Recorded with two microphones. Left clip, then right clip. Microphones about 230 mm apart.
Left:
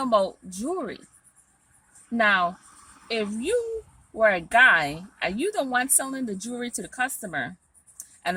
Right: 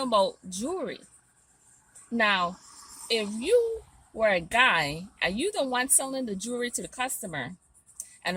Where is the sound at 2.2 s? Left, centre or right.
Left.